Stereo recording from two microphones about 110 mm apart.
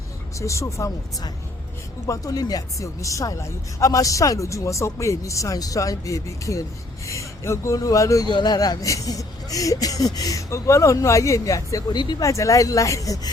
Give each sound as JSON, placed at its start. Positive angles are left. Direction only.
{"t": 0.3, "sound": "speech", "side_deg": 30}
{"t": 2.0, "sound": "speech", "side_deg": 35}
{"t": 8.3, "sound": "speech", "side_deg": 40}
{"t": 12.2, "sound": "speech", "side_deg": 30}